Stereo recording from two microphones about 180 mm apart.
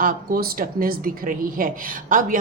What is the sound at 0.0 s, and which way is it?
Speech, 50° right (ahead or behind).